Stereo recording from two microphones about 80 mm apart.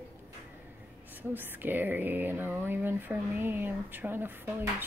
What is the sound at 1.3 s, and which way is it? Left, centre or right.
Speech, right.